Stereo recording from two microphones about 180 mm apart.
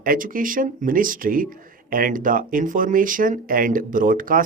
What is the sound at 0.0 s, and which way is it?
Speech, 50° right (ahead or behind).